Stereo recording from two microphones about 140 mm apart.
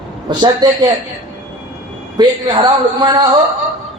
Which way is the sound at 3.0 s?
30° right (ahead or behind).